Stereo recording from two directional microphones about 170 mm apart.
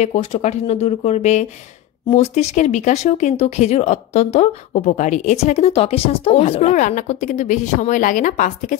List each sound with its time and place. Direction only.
0.0 s speech: 40° left (ahead or behind)